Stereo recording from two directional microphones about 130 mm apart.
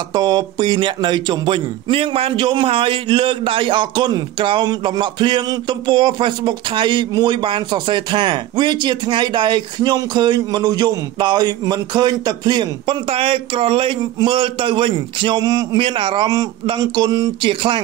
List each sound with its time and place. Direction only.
0.1 s a man's voice: 30° right (ahead or behind)